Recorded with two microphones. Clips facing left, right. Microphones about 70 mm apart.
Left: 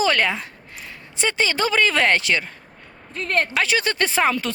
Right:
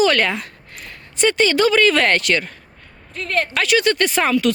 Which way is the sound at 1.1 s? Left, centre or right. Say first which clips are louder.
Right 6 dB; centre.